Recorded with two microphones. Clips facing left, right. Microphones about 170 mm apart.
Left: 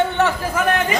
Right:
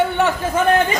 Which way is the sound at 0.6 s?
30° right (ahead or behind).